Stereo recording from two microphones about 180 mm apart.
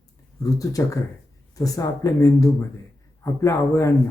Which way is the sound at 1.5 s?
20° left (ahead or behind).